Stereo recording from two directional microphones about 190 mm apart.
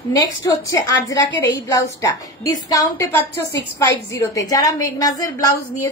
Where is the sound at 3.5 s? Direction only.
65° left (ahead or behind).